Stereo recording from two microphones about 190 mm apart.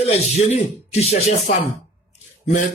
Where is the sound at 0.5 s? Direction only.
35° left (ahead or behind).